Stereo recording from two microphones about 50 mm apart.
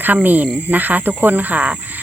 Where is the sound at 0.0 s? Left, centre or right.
Right.